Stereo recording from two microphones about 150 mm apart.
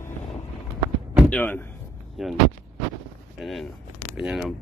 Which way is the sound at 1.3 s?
10° left (ahead or behind).